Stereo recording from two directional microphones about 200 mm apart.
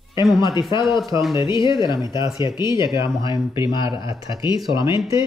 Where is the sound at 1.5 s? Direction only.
25° left (ahead or behind).